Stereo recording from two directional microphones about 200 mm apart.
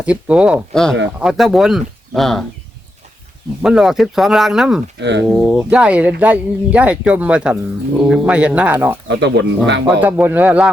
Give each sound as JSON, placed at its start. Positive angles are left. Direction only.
{"t": 0.0, "sound": "speech", "side_deg": -5}
{"t": 3.6, "sound": "speech", "side_deg": 0}
{"t": 4.9, "sound": "speech", "side_deg": -60}
{"t": 5.3, "sound": "speech", "side_deg": 0}
{"t": 9.0, "sound": "speech", "side_deg": -60}
{"t": 10.0, "sound": "speech", "side_deg": -10}